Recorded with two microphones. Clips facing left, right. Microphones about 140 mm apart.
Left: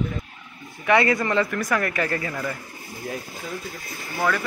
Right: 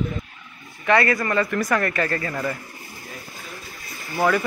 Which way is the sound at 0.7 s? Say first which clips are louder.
Even; 20° left (ahead or behind).